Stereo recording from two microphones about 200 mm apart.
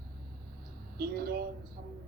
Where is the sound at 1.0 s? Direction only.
50° right (ahead or behind).